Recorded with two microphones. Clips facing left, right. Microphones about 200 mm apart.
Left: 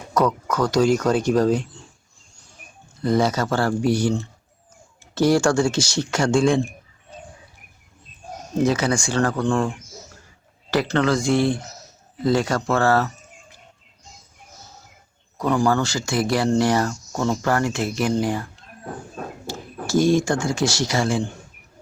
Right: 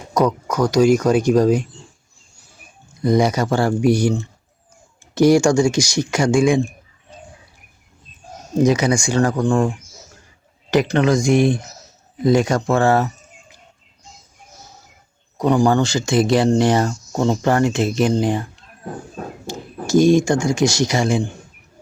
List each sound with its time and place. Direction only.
0.1 s speech: 15° right (ahead or behind)
3.0 s speech: 15° right (ahead or behind)
8.6 s speech: 15° right (ahead or behind)
15.4 s speech: 15° right (ahead or behind)
19.5 s speech: 15° right (ahead or behind)